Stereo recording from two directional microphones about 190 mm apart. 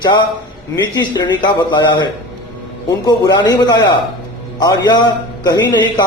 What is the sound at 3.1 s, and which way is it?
A man's voice, 20° left (ahead or behind).